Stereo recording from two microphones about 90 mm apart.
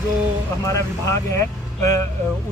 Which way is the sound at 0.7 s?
35° left (ahead or behind).